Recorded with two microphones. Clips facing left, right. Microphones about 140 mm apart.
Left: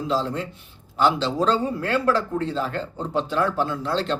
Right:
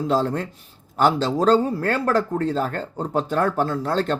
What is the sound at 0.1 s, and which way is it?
A man's voice, 50° right (ahead or behind).